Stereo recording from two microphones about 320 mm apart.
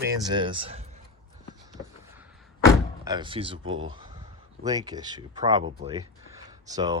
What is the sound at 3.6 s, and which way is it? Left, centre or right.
Speech, right.